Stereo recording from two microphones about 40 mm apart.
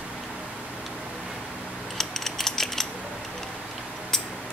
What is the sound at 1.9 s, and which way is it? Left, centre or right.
Mechanisms, centre.